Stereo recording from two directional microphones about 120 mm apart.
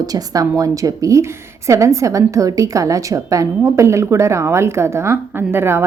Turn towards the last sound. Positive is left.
turn(degrees=-20)  # may be behind; listen again after turning